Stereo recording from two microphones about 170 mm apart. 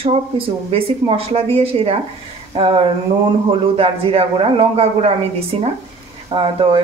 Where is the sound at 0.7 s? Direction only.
35° right (ahead or behind).